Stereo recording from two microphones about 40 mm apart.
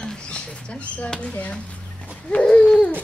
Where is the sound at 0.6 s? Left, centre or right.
Left.